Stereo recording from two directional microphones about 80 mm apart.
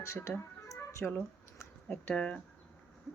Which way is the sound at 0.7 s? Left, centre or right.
Left.